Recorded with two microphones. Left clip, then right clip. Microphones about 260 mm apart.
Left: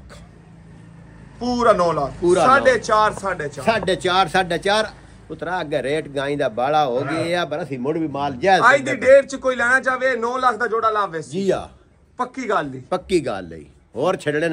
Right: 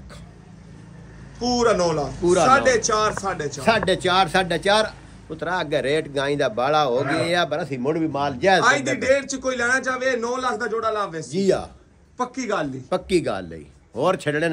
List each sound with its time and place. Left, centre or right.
1.4 s a man's voice: centre
11.4 s a man's voice: left
12.2 s a man's voice: centre